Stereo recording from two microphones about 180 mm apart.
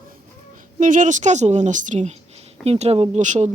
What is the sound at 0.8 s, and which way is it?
Speech, 45° right (ahead or behind).